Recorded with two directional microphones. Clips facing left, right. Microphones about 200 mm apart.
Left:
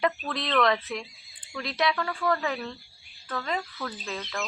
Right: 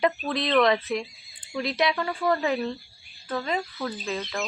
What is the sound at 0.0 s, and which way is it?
Speech, 20° right (ahead or behind).